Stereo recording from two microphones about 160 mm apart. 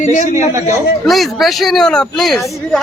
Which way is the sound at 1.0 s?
Centre (ahead or behind).